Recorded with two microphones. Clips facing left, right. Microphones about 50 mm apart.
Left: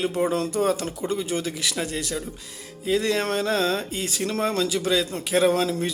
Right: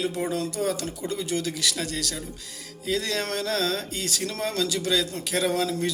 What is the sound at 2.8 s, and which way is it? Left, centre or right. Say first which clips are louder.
Music: left 5 dB; left.